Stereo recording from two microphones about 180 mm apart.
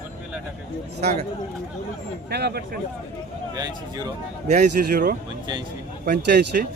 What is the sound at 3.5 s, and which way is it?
Speech, 20° right (ahead or behind).